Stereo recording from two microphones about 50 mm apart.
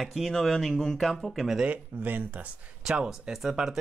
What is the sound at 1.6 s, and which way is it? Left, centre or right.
Speech, right.